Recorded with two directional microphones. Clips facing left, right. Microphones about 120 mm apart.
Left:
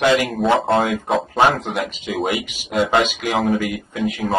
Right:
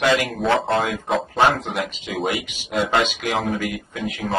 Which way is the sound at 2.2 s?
10° left (ahead or behind).